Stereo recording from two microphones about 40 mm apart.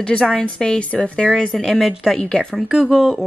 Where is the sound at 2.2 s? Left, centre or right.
Left.